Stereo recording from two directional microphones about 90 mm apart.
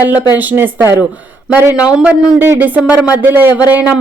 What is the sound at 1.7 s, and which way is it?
Speech, 15° right (ahead or behind).